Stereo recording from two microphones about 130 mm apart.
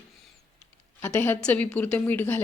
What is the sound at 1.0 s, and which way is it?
Speech, 15° left (ahead or behind).